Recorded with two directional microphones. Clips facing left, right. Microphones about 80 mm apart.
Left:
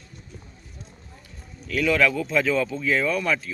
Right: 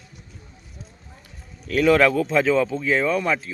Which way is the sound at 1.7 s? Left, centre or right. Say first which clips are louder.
Right 5 dB; right.